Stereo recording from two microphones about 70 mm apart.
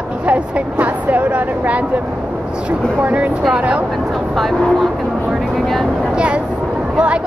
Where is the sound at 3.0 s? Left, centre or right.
Right.